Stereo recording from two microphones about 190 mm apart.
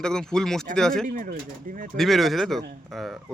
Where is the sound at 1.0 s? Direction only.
45° right (ahead or behind).